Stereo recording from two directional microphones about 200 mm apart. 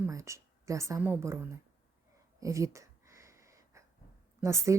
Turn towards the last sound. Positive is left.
turn(degrees=-15)  # may be behind; listen again after turning